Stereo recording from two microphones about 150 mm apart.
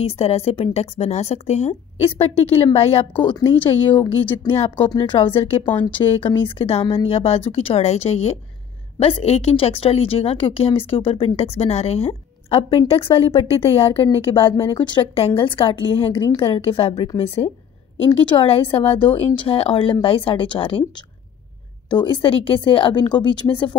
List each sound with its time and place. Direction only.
0.0 s a woman's voice: 45° left (ahead or behind)
3.9 s speech: 10° left (ahead or behind)
4.5 s a woman's voice: 35° left (ahead or behind)
5.7 s speech: 10° left (ahead or behind)
6.2 s a woman's voice: 40° left (ahead or behind)
18.2 s a woman's voice: 35° left (ahead or behind)
21.8 s a woman's voice: 30° left (ahead or behind)